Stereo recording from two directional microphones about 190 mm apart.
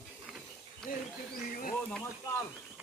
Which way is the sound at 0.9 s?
45° left (ahead or behind).